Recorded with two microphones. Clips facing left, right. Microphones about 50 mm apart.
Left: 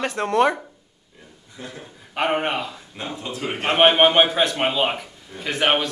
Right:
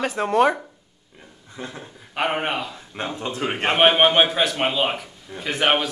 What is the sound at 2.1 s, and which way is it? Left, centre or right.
Speech, centre.